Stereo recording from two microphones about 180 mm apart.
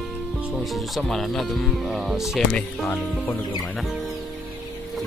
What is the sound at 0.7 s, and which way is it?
Speech, centre (ahead or behind).